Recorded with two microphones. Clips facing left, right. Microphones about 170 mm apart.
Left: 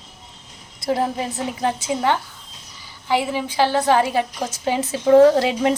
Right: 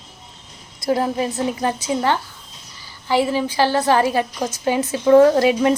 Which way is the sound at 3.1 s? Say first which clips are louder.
Right 3 dB; 20° left (ahead or behind).